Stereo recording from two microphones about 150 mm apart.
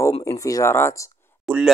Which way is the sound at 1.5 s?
5° left (ahead or behind).